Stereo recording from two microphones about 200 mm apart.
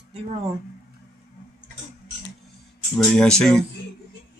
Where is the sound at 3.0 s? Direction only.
5° left (ahead or behind).